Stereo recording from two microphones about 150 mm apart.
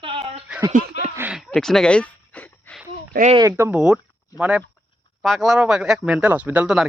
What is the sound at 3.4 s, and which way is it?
Speech, 20° right (ahead or behind).